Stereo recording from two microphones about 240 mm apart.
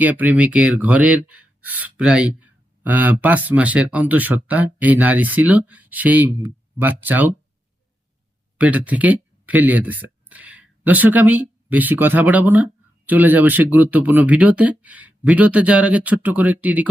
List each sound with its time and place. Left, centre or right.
0.0 s speech: centre
8.5 s speech: centre